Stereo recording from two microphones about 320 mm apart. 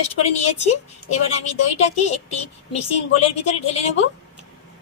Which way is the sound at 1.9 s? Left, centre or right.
Left.